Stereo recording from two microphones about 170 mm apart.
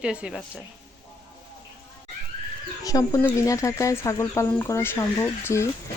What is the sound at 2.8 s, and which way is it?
Speech, 20° left (ahead or behind).